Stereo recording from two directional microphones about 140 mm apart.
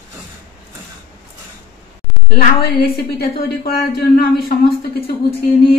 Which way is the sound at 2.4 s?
90° left.